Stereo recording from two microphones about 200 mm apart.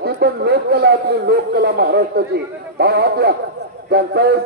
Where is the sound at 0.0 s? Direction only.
55° right (ahead or behind).